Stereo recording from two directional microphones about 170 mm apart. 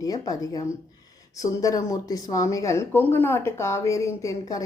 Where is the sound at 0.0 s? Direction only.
20° left (ahead or behind).